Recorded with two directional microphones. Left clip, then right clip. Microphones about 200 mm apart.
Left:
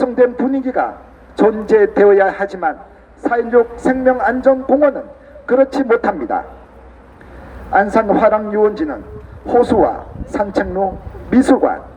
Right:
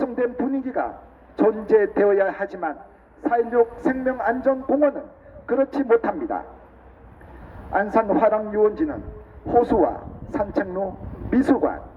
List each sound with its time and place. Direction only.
0.0 s a man's voice: 35° left (ahead or behind)
7.7 s a man's voice: 35° left (ahead or behind)